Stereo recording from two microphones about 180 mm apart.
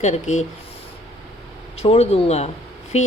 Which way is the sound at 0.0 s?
40° left (ahead or behind).